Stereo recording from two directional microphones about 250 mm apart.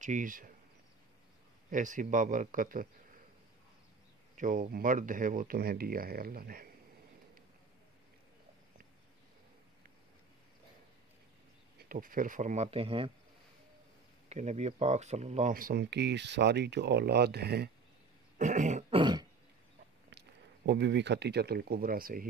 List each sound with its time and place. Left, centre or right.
0.0 s speech: right
1.7 s speech: right
4.4 s speech: right
11.9 s speech: right
14.3 s speech: right
18.4 s throat clearing: right
20.1 s speech: right